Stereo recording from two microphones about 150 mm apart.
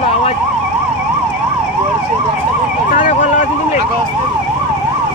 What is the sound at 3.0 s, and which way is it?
Vehicle, 55° left (ahead or behind).